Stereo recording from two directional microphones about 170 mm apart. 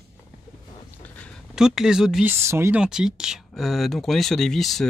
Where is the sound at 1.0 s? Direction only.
10° left (ahead or behind).